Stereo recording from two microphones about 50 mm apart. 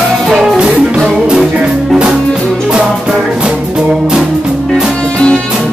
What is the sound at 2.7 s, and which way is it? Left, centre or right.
Music, centre.